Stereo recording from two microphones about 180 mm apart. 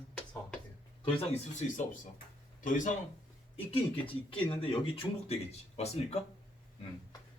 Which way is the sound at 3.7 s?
30° left (ahead or behind).